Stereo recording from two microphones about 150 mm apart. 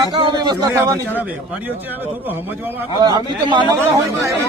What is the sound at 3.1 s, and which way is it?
Speech, 30° right (ahead or behind).